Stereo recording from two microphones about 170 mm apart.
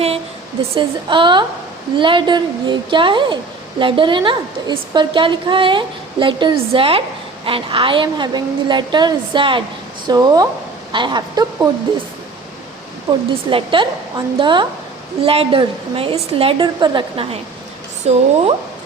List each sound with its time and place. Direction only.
0.8 s a woman's voice: 30° right (ahead or behind)
13.1 s a woman's voice: 30° right (ahead or behind)
18.0 s a woman's voice: 40° right (ahead or behind)